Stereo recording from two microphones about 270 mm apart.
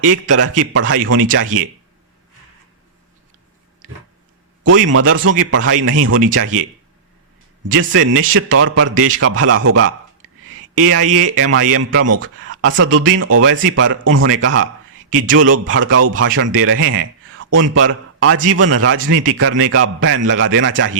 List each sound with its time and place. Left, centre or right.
0.0 s a man's voice: right
4.6 s a man's voice: right
7.7 s a man's voice: right
10.8 s a man's voice: right
18.4 s a man's voice: right